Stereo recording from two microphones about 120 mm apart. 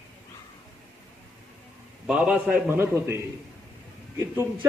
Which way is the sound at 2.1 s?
10° right (ahead or behind).